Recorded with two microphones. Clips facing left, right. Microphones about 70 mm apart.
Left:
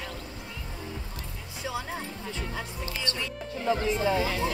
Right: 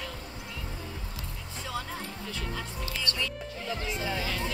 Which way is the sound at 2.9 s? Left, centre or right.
Left.